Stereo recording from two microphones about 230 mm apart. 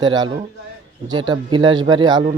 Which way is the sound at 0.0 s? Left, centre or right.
Centre.